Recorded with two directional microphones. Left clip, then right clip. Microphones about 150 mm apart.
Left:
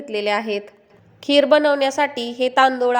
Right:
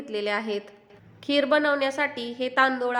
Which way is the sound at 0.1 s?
25° left (ahead or behind).